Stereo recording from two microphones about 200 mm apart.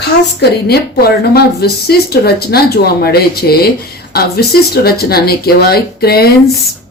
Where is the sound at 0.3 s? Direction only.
50° left (ahead or behind).